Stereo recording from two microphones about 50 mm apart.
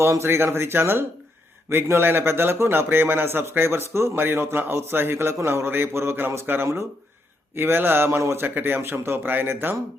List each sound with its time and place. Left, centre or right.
0.0 s a man's voice: right
5.5 s a man's voice: right
8.2 s a man's voice: right
8.4 s a man's voice: right